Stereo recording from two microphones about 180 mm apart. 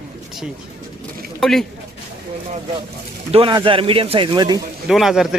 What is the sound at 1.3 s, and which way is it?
Speech, 5° left (ahead or behind).